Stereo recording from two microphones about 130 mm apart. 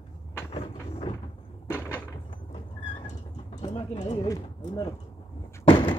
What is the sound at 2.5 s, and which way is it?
Vehicle, 40° left (ahead or behind).